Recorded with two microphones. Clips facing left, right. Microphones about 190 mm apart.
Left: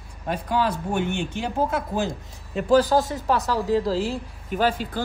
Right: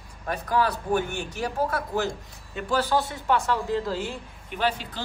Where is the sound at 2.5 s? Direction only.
40° left (ahead or behind).